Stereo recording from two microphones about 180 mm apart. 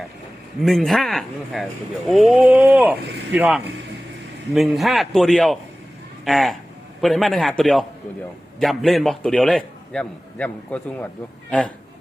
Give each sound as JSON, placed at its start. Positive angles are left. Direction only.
{"t": 0.6, "sound": "a man's voice", "side_deg": 0}